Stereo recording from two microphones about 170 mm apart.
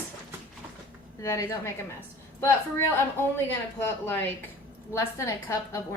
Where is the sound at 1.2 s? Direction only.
15° left (ahead or behind).